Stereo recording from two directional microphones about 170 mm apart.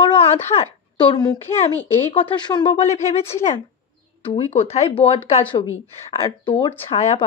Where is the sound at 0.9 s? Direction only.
25° left (ahead or behind).